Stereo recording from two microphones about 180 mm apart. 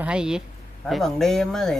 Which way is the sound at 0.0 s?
5° right (ahead or behind).